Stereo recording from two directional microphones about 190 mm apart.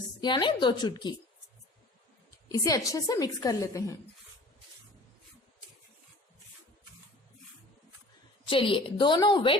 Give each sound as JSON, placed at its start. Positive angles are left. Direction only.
{"t": 0.2, "sound": "a woman's voice", "side_deg": 25}
{"t": 2.5, "sound": "a woman's voice", "side_deg": 20}
{"t": 8.4, "sound": "a woman's voice", "side_deg": 25}